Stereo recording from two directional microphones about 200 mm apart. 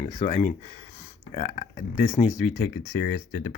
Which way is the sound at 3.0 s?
55° left (ahead or behind).